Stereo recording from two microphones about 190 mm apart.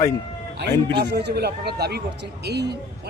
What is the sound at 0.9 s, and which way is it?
Speech, 60° right (ahead or behind).